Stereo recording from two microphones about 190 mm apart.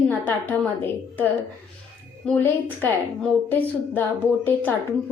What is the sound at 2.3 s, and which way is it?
A woman's voice, 5° left (ahead or behind).